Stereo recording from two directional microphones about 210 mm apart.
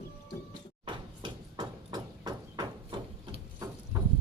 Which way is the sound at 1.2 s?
20° right (ahead or behind).